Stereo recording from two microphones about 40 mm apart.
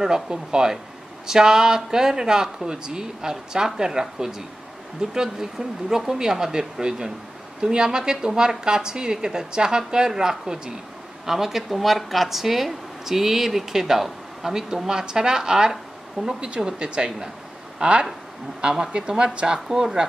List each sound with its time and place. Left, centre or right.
0.0 s speech: centre
16.3 s speech: right